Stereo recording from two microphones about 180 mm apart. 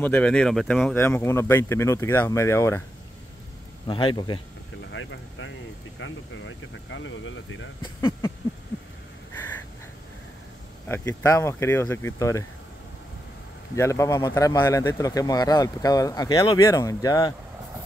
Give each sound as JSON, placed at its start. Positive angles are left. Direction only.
{"t": 0.0, "sound": "speech", "side_deg": 10}
{"t": 3.8, "sound": "a man's voice", "side_deg": 25}
{"t": 4.9, "sound": "speech", "side_deg": 90}
{"t": 7.8, "sound": "speech", "side_deg": 25}
{"t": 10.9, "sound": "speech", "side_deg": 15}
{"t": 13.7, "sound": "a man's voice", "side_deg": 15}